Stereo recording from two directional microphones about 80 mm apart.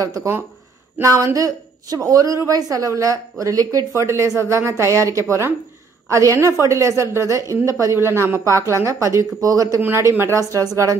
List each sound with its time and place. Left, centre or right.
0.0 s a woman's voice: right
9.8 s speech: right
10.6 s a woman's voice: right